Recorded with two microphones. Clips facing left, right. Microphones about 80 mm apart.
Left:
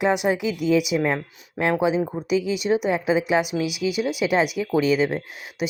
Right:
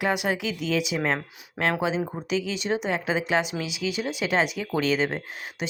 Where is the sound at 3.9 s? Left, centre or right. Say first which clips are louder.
Left 5 dB; right.